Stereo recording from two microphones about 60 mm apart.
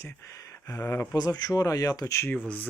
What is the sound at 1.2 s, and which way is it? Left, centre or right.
Speech, left.